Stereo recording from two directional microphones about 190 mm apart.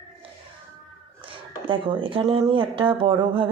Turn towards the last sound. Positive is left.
turn(degrees=-25)  # may be behind; listen again after turning